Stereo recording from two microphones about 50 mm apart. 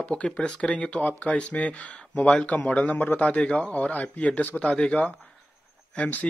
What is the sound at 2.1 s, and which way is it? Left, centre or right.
Speech, centre.